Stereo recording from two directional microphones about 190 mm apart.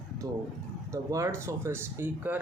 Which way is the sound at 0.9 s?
15° right (ahead or behind).